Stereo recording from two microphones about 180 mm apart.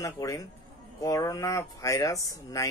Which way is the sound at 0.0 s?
20° left (ahead or behind).